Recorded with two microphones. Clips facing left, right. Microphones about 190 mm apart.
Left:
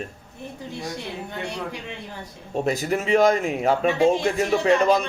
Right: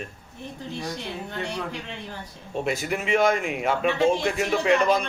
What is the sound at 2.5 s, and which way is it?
Speech, 40° left (ahead or behind).